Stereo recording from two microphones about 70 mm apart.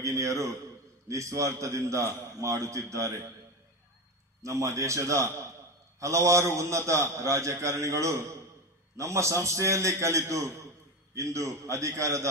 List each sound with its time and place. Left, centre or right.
0.0 s a man's voice: right
4.4 s a man's voice: right